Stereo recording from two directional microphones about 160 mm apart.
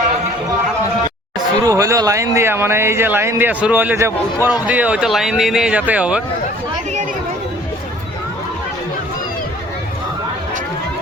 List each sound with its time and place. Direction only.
1.6 s speech: 20° right (ahead or behind)